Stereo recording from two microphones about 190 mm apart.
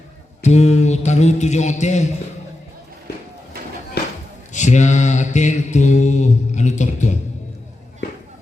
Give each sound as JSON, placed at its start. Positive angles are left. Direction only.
{"t": 0.4, "sound": "mantra", "side_deg": 35}
{"t": 4.0, "sound": "a sound", "side_deg": 60}
{"t": 4.5, "sound": "mantra", "side_deg": 40}